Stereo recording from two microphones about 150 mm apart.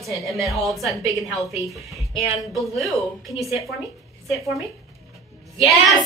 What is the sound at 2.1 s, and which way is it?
Speech, centre (ahead or behind).